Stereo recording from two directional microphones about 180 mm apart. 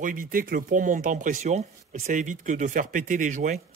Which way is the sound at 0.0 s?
50° right (ahead or behind).